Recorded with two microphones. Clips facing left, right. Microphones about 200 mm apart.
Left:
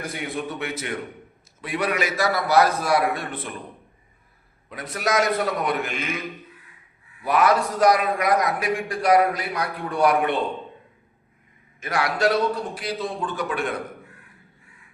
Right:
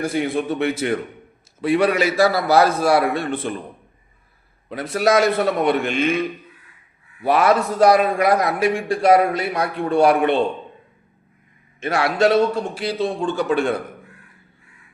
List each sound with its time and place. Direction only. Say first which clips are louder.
0.0 s a man's voice: right 8 dB; 30° right (ahead or behind)
4.7 s a man's voice: right 7 dB; 30° right (ahead or behind)
11.8 s a man's voice: right 5 dB; 25° right (ahead or behind)